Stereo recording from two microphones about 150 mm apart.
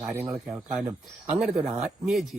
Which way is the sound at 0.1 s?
10° right (ahead or behind).